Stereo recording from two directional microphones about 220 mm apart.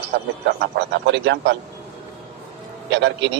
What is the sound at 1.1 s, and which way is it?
Speech, 55° right (ahead or behind).